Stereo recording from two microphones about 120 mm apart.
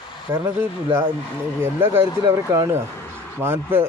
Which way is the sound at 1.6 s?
20° right (ahead or behind).